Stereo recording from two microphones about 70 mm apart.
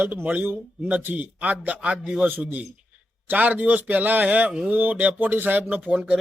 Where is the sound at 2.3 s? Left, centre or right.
Right.